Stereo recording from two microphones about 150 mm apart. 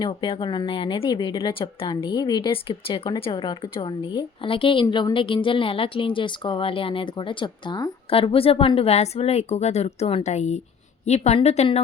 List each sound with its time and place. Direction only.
0.0 s a woman's voice: 35° left (ahead or behind)